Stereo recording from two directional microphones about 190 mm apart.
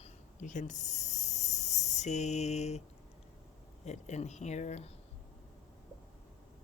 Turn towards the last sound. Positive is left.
turn(degrees=35)  # may be behind; listen again after turning